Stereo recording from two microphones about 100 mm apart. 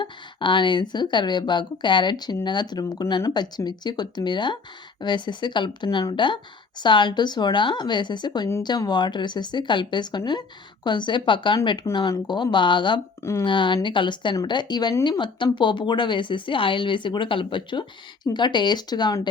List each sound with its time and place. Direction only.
0.0 s speech: 55° left (ahead or behind)